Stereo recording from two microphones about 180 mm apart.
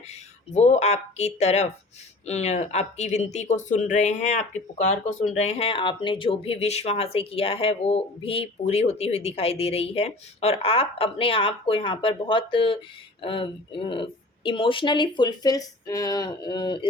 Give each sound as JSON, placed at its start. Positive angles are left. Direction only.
{"t": 0.1, "sound": "speech", "side_deg": 40}